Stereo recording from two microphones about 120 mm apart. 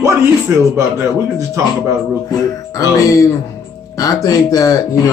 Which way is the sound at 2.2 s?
30° left (ahead or behind).